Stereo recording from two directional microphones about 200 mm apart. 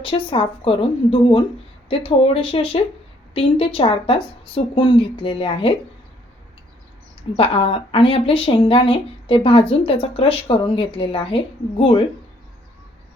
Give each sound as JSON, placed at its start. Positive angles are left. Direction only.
{"t": 0.0, "sound": "speech", "side_deg": 25}
{"t": 7.3, "sound": "speech", "side_deg": 30}